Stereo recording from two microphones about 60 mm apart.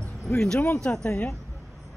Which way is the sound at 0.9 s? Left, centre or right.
Left.